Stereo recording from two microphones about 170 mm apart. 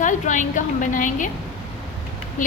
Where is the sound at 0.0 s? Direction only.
45° left (ahead or behind).